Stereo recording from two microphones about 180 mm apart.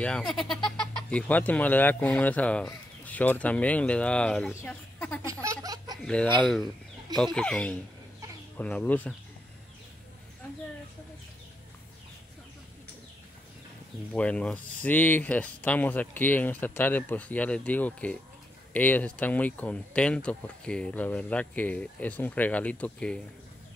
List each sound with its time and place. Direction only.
0.0 s speech: 5° left (ahead or behind)
4.9 s a sound: 10° left (ahead or behind)
5.3 s baby laughter: 20° right (ahead or behind)
5.9 s speech: 5° left (ahead or behind)
7.3 s speech: 5° left (ahead or behind)
14.1 s speech: 5° left (ahead or behind)